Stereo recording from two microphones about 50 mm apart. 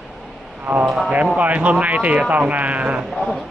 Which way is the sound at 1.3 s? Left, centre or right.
Right.